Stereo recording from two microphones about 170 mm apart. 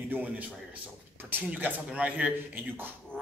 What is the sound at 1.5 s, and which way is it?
A man's voice, 10° right (ahead or behind).